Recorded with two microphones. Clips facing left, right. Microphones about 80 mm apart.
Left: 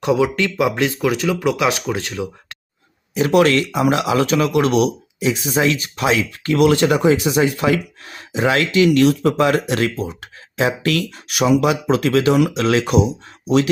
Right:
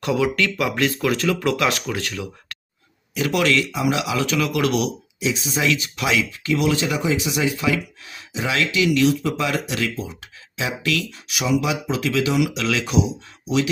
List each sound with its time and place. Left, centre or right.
0.0 s speech: left
3.2 s speech: left
5.5 s speech: left
6.3 s speech: left